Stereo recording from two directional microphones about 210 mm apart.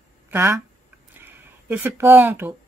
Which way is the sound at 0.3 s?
10° right (ahead or behind).